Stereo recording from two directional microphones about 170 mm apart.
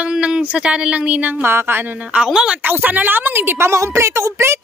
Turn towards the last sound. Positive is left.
turn(degrees=-15)  # may be behind; listen again after turning